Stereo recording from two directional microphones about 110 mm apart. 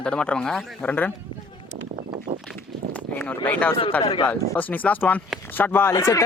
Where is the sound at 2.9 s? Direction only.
15° left (ahead or behind).